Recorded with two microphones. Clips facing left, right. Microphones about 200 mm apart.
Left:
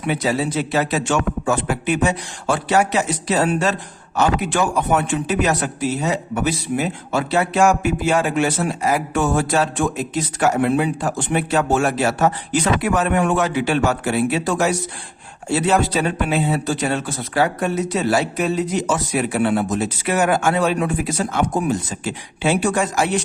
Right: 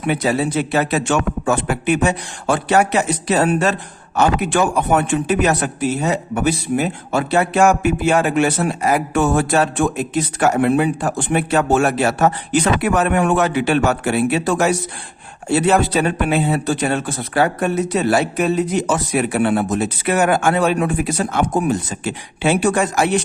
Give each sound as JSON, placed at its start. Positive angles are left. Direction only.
{"t": 0.0, "sound": "a man's voice", "side_deg": -55}